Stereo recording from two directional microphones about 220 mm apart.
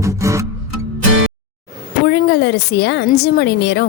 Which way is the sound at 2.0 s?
50° left (ahead or behind).